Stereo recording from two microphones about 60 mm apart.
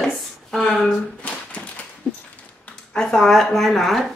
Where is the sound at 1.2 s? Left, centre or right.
Left.